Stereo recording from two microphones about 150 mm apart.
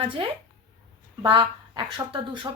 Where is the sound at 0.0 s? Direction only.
30° right (ahead or behind).